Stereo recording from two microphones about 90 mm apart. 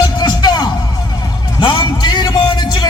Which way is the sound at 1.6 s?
60° left (ahead or behind).